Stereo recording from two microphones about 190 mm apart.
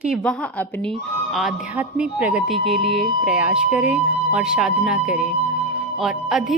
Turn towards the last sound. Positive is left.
turn(degrees=0)  # may be behind; listen again after turning